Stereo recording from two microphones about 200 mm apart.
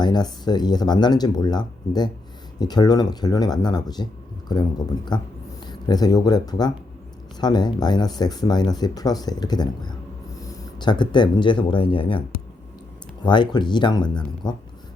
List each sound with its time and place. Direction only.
0.0 s speech: 20° left (ahead or behind)
13.2 s speech: 20° left (ahead or behind)